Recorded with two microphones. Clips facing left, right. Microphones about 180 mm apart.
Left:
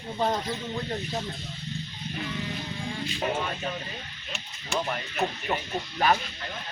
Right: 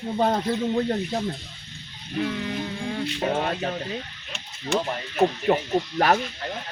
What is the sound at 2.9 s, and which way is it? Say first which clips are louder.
Speech: right 4 dB; 60° right (ahead or behind).